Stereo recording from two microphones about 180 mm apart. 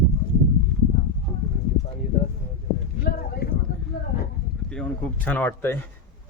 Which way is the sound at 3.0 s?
55° left (ahead or behind).